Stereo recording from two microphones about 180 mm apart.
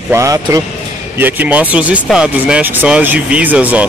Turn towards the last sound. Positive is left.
turn(degrees=-10)  # may be behind; listen again after turning